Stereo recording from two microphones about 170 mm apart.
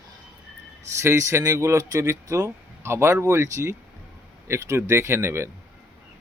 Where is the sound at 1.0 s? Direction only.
15° right (ahead or behind).